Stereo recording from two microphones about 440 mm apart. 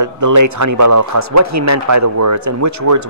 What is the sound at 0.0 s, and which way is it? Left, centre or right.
Speech, right.